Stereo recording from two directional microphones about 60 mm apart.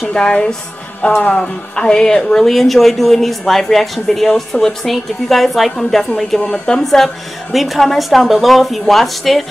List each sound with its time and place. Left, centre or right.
0.1 s speech: centre
6.8 s speech: centre